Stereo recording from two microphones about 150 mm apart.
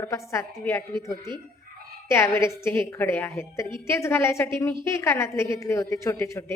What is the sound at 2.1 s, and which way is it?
A woman's voice, 20° left (ahead or behind).